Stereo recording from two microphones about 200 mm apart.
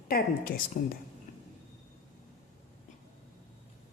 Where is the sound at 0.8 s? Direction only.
45° left (ahead or behind).